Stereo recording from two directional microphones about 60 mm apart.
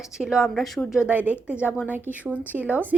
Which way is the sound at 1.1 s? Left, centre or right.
Right.